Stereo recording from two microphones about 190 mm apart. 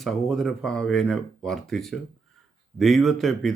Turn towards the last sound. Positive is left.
turn(degrees=0)  # may be behind; listen again after turning